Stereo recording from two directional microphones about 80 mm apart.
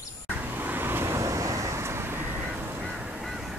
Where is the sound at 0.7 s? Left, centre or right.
Right.